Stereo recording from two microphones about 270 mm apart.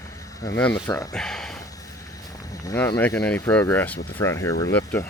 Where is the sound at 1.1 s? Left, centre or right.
Centre.